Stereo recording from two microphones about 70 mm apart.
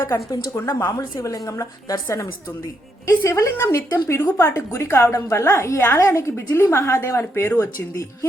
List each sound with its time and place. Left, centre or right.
0.5 s a woman's voice: left